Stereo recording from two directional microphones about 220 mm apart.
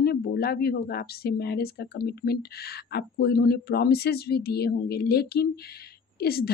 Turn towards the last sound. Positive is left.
turn(degrees=45)  # may be behind; listen again after turning